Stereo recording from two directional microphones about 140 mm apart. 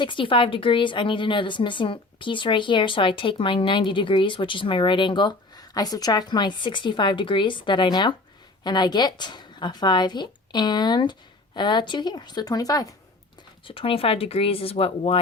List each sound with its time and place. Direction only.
0.0 s speech: 35° left (ahead or behind)
13.7 s speech: 40° left (ahead or behind)